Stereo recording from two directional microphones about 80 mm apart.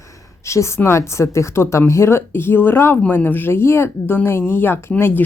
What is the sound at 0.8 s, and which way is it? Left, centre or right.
Speech, left.